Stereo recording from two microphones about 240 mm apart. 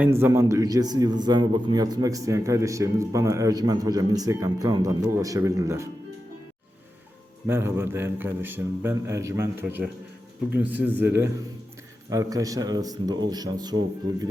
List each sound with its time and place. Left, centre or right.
0.0 s a man's voice: centre
7.4 s a man's voice: centre